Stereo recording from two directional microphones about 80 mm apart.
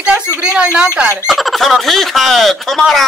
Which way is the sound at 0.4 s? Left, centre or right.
Centre.